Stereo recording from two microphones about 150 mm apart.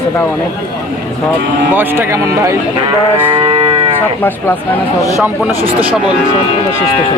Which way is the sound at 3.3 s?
35° right (ahead or behind).